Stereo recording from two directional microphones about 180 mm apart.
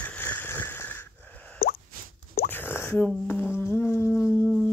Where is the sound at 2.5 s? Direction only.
10° left (ahead or behind).